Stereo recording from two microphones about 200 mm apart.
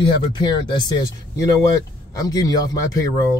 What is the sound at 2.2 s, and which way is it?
Speech, 20° left (ahead or behind).